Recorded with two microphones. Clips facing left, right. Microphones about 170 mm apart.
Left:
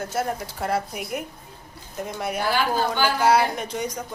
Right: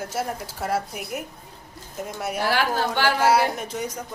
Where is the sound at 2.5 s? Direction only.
70° right (ahead or behind).